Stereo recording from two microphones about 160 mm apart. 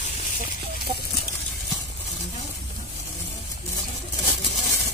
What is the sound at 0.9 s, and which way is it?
Chicken, 35° right (ahead or behind).